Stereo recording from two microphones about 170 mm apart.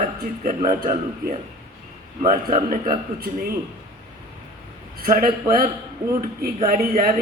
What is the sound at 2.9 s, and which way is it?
Speech, 60° right (ahead or behind).